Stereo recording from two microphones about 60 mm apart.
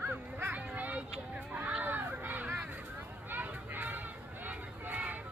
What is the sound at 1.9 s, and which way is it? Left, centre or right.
Crowd, right.